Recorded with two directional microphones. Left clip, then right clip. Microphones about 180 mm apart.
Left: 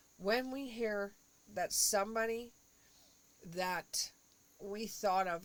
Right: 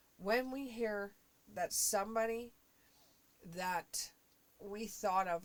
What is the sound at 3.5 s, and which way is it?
Speech, 40° left (ahead or behind).